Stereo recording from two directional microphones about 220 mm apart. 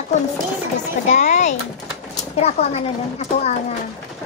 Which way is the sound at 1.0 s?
30° left (ahead or behind).